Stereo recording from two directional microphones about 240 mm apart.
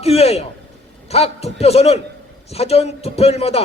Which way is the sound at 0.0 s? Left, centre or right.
Left.